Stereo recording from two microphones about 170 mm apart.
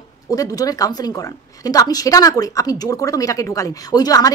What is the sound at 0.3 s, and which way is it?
A woman's voice, 20° left (ahead or behind).